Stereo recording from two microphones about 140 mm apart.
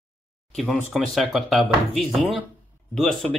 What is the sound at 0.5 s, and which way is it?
Speech, 5° left (ahead or behind).